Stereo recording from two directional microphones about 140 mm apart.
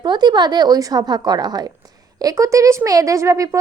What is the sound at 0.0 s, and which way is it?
A woman's voice, 30° right (ahead or behind).